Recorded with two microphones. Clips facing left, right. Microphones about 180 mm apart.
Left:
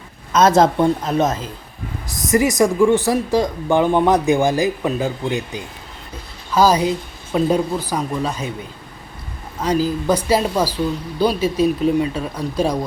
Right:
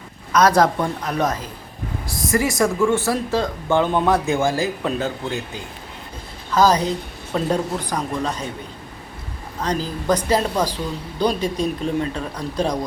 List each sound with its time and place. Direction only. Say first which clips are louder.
0.3 s a man's voice: left 3 dB; 25° left (ahead or behind); by 8.4 s 10° left (ahead or behind)
9.6 s speech: left 6 dB; 10° left (ahead or behind)